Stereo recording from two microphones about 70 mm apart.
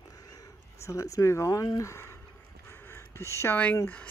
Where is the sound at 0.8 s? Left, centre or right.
Left.